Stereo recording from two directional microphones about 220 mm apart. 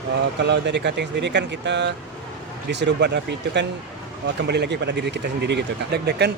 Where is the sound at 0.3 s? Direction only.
50° right (ahead or behind).